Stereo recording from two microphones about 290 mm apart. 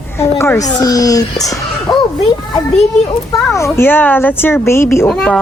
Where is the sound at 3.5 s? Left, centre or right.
Centre.